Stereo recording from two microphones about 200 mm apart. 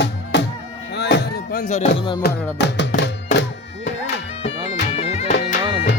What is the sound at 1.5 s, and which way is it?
Music, 30° left (ahead or behind).